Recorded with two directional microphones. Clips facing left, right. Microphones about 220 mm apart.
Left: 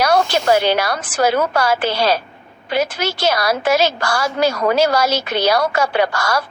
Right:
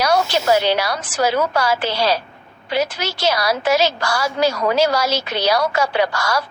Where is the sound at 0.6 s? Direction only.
50° left (ahead or behind).